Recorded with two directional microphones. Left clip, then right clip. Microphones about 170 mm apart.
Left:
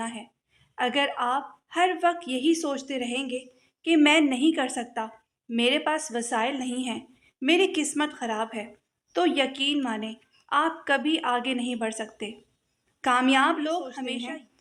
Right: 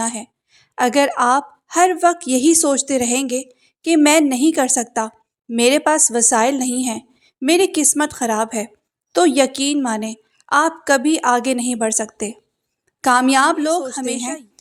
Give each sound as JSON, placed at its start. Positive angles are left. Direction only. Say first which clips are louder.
{"t": 0.0, "sound": "a woman's voice", "louder": "right 10 dB", "side_deg": -50}